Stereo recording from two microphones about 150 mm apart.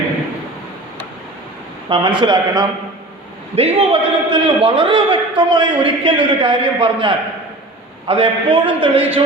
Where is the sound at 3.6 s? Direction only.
40° right (ahead or behind).